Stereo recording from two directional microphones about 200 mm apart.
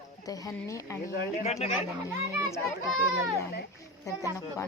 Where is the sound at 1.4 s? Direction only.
30° left (ahead or behind).